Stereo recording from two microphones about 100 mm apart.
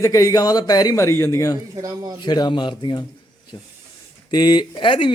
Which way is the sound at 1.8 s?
40° right (ahead or behind).